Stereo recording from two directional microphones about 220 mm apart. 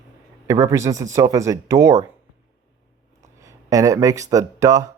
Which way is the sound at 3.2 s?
15° right (ahead or behind).